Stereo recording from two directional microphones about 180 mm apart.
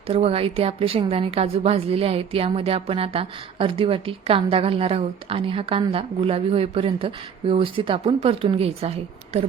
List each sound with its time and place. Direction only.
0.1 s a woman's voice: 30° right (ahead or behind)